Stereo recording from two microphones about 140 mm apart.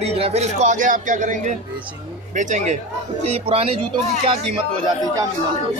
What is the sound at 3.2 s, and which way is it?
Speech, 45° right (ahead or behind).